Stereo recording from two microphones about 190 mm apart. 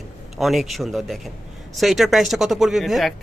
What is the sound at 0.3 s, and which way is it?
Speech, centre (ahead or behind).